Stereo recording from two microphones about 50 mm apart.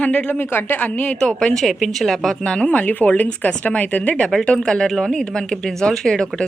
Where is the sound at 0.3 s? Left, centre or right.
Left.